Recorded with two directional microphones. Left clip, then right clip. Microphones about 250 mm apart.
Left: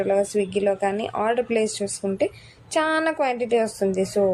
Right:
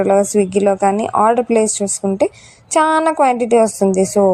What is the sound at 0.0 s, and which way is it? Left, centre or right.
A woman's voice, right.